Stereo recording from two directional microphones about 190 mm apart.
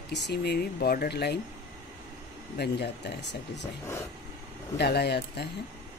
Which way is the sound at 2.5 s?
60° left (ahead or behind).